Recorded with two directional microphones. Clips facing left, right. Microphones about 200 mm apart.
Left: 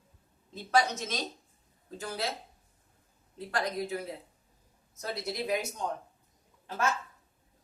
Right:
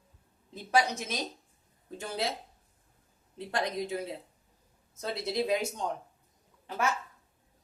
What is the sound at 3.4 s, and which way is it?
Speech, 20° right (ahead or behind).